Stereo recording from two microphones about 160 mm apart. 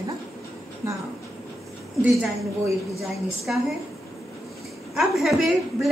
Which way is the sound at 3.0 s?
Centre (ahead or behind).